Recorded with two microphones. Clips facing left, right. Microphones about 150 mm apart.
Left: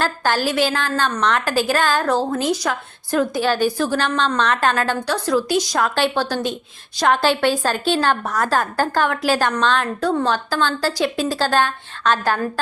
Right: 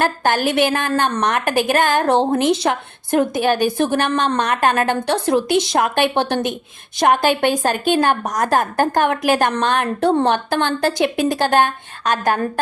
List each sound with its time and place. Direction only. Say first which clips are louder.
0.0 s a woman's voice: right 2 dB; 20° right (ahead or behind)